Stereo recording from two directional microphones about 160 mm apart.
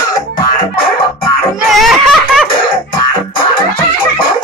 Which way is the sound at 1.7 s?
Centre (ahead or behind).